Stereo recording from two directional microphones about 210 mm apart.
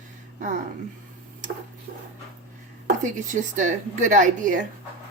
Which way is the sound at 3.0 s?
35° right (ahead or behind).